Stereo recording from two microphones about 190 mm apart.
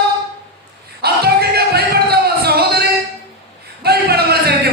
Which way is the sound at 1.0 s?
55° right (ahead or behind).